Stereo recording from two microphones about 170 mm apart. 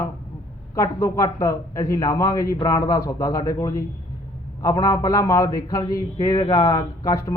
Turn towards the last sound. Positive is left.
turn(degrees=20)  # may be behind; listen again after turning